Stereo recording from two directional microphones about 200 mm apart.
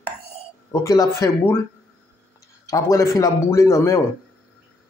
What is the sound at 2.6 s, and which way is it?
Speech, 15° left (ahead or behind).